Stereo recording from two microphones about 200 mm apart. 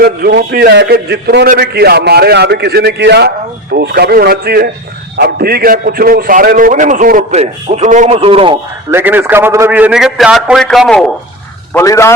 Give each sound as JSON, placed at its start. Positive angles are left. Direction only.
{"t": 0.0, "sound": "a man's voice", "side_deg": -50}
{"t": 8.9, "sound": "a man's voice", "side_deg": -10}
{"t": 11.7, "sound": "a man's voice", "side_deg": 15}